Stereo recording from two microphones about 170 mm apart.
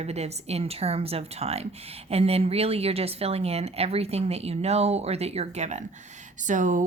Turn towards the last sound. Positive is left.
turn(degrees=-50)  # may be behind; listen again after turning